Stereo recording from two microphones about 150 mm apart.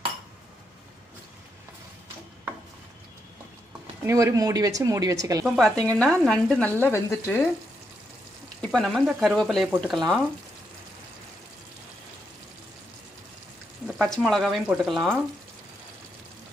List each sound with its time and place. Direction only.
4.0 s speech: 20° right (ahead or behind)
5.6 s speech: 5° left (ahead or behind)
8.5 s speech: 5° left (ahead or behind)
13.9 s speech: centre (ahead or behind)